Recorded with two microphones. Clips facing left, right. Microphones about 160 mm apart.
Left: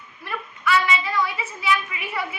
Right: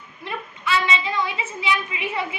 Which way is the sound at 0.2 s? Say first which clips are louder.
Left 1 dB; 20° right (ahead or behind).